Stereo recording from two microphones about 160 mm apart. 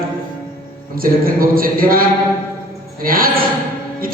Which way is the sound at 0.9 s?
65° right (ahead or behind).